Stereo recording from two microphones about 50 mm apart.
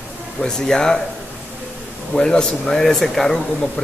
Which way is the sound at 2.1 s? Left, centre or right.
Centre.